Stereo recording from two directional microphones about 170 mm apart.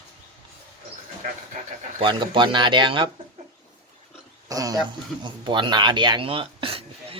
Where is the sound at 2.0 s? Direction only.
25° right (ahead or behind).